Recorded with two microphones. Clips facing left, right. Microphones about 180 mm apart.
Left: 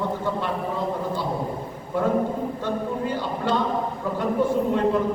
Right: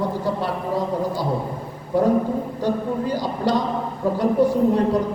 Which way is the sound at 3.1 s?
40° right (ahead or behind).